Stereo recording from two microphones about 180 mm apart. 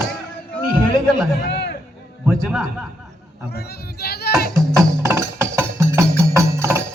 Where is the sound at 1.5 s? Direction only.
70° left (ahead or behind).